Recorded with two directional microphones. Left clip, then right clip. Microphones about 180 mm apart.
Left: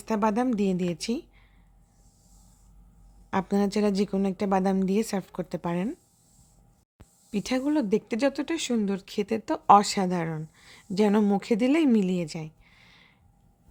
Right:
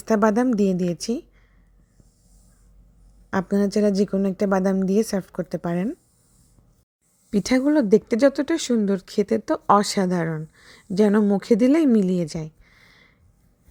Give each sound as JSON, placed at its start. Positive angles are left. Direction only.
{"t": 0.0, "sound": "a woman's voice", "side_deg": -25}
{"t": 3.2, "sound": "a woman's voice", "side_deg": -15}
{"t": 7.3, "sound": "speech", "side_deg": -30}